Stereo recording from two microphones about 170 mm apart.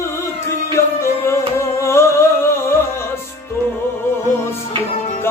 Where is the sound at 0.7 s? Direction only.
15° left (ahead or behind).